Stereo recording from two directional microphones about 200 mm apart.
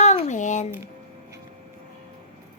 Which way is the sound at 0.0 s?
35° left (ahead or behind).